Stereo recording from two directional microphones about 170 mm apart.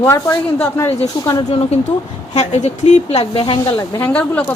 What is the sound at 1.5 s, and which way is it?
Speech, 40° left (ahead or behind).